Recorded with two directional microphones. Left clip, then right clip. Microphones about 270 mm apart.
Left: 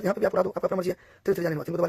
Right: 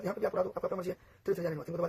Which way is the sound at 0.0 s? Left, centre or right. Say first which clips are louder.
Left 8 dB; left.